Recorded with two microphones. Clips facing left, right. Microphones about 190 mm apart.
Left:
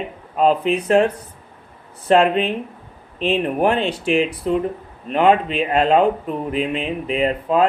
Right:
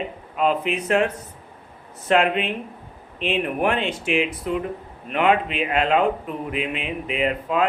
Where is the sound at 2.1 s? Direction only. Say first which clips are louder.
Left 4 dB; 35° left (ahead or behind).